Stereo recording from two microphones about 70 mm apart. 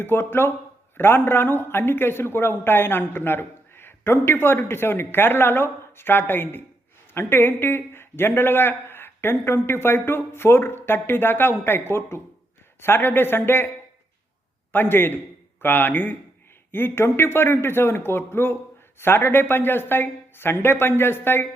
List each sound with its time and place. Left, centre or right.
0.0 s speech: left
14.7 s a man's voice: left